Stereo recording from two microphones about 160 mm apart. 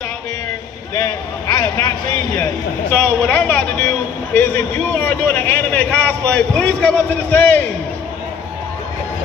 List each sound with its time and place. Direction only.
0.9 s a man's voice: 20° left (ahead or behind)
2.9 s a man's voice: 5° left (ahead or behind)